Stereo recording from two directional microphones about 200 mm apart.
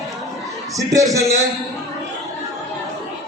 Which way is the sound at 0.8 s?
15° right (ahead or behind).